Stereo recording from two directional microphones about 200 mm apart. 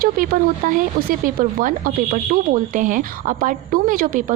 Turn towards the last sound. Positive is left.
turn(degrees=-45)  # may be behind; listen again after turning